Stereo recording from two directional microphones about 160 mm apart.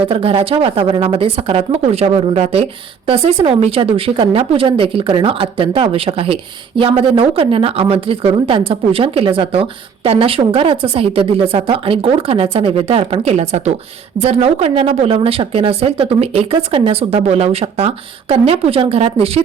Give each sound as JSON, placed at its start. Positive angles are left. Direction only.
{"t": 0.1, "sound": "a woman's voice", "side_deg": -35}